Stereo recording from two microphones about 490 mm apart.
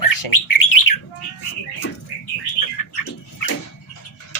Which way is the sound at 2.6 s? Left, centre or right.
Left.